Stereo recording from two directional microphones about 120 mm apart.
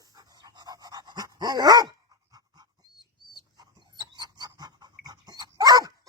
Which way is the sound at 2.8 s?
35° right (ahead or behind).